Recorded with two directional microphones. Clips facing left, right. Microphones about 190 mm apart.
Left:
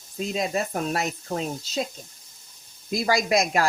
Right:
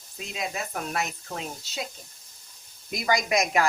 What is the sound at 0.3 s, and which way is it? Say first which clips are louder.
Speech: left 5 dB; 35° left (ahead or behind).